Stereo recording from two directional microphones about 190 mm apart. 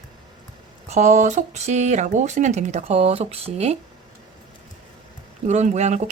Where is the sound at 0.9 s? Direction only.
40° right (ahead or behind).